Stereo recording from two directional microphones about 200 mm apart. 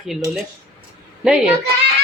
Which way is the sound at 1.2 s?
5° right (ahead or behind).